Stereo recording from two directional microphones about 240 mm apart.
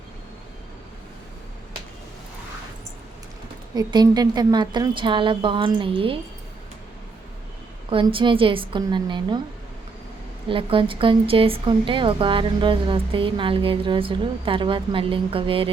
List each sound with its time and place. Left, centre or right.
3.8 s a woman's voice: centre
7.9 s a woman's voice: right
10.5 s a woman's voice: right